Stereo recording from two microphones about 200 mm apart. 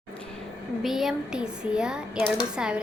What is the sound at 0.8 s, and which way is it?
A woman's voice, centre (ahead or behind).